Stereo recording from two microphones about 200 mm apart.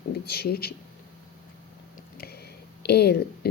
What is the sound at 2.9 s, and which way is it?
Speech, 55° left (ahead or behind).